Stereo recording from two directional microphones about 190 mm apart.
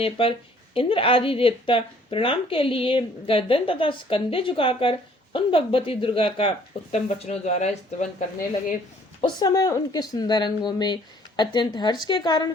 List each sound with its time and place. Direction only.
0.0 s speech: 30° left (ahead or behind)
9.2 s speech: 20° left (ahead or behind)